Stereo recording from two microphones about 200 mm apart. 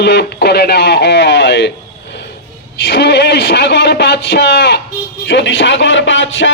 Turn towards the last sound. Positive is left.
turn(degrees=70)  # may be behind; listen again after turning